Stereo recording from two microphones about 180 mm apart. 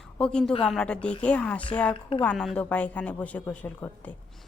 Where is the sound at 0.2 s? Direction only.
5° left (ahead or behind).